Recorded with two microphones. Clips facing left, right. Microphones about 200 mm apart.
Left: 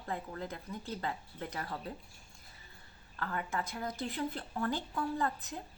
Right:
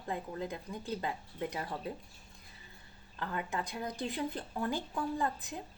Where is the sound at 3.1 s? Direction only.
15° right (ahead or behind).